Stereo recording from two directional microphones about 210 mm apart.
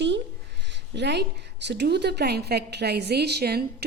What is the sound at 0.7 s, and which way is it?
A woman's voice, 55° right (ahead or behind).